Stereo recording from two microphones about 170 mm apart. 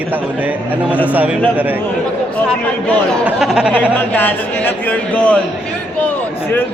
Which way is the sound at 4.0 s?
10° left (ahead or behind).